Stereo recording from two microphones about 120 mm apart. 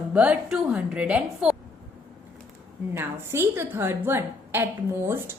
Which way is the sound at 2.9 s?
20° right (ahead or behind).